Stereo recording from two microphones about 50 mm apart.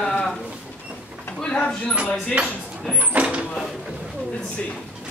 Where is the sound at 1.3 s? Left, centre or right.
Left.